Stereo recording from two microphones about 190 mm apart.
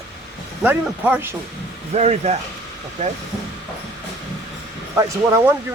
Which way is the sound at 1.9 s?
35° right (ahead or behind).